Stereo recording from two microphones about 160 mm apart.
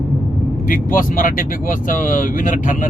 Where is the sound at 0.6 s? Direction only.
60° left (ahead or behind).